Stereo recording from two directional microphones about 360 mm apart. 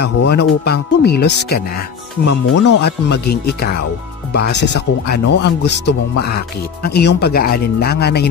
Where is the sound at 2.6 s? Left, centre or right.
Left.